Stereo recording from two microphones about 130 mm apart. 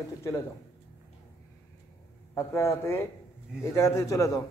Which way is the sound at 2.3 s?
20° left (ahead or behind).